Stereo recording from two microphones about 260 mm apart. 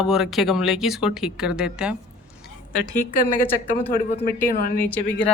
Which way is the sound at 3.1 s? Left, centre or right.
Left.